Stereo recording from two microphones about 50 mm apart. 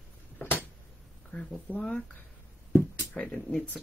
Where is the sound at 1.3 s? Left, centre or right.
Centre.